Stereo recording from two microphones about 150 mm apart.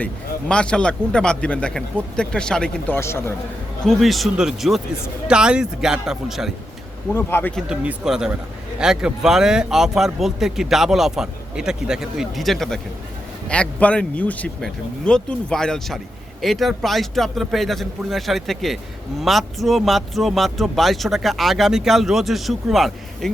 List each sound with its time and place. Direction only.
0.0 s speech: 5° left (ahead or behind)
3.8 s speech: centre (ahead or behind)
7.1 s speech: 15° left (ahead or behind)
7.5 s speech: 5° right (ahead or behind)